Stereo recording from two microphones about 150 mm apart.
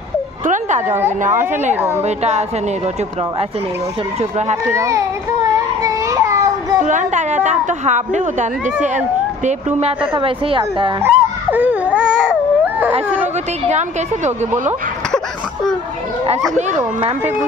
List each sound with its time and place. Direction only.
0.5 s a sound: 55° right (ahead or behind)
0.8 s a woman's voice: 15° right (ahead or behind)
1.2 s a woman's voice: 60° right (ahead or behind)
1.8 s a woman's voice: 15° right (ahead or behind)
2.0 s a woman's voice: 45° right (ahead or behind)
4.2 s a woman's voice: 50° right (ahead or behind)
4.6 s speech: 20° right (ahead or behind)
5.9 s a sound: 20° right (ahead or behind)
6.8 s a woman's voice: 55° right (ahead or behind); by 10.6 s 35° right (ahead or behind)
11.0 s baby cry: 10° right (ahead or behind)
13.7 s a woman's voice: 50° right (ahead or behind)
15.0 s a sound: 5° left (ahead or behind)